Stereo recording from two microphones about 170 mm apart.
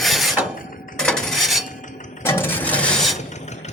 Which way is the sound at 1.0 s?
5° left (ahead or behind).